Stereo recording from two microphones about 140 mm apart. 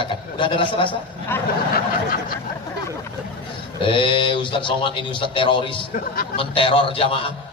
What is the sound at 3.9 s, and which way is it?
A man's voice, 35° left (ahead or behind).